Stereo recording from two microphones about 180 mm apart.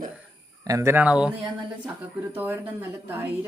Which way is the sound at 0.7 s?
15° right (ahead or behind).